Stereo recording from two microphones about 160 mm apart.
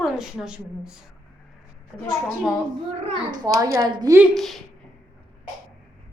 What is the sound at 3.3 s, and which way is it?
Speech, 25° right (ahead or behind).